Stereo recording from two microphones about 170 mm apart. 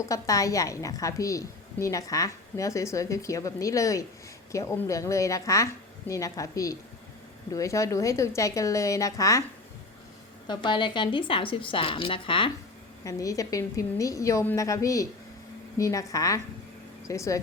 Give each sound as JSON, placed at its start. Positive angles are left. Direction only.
{"t": 0.0, "sound": "a woman's voice", "side_deg": 20}
{"t": 10.4, "sound": "a woman's voice", "side_deg": 25}
{"t": 13.1, "sound": "a woman's voice", "side_deg": 20}